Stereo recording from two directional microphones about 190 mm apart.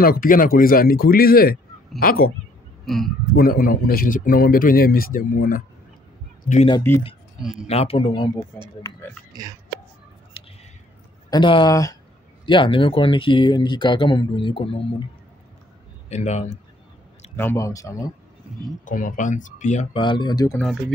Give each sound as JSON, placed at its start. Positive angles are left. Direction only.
{"t": 0.0, "sound": "speech", "side_deg": 50}
{"t": 2.8, "sound": "speech", "side_deg": 0}
{"t": 3.3, "sound": "speech", "side_deg": 50}
{"t": 6.9, "sound": "speech", "side_deg": 10}
{"t": 7.6, "sound": "speech", "side_deg": 30}
{"t": 9.3, "sound": "speech", "side_deg": -20}
{"t": 10.4, "sound": "a sound", "side_deg": 30}
{"t": 11.2, "sound": "speech", "side_deg": 25}
{"t": 16.1, "sound": "speech", "side_deg": 35}
{"t": 17.4, "sound": "speech", "side_deg": 15}
{"t": 18.9, "sound": "speech", "side_deg": 45}
{"t": 20.0, "sound": "speech", "side_deg": 25}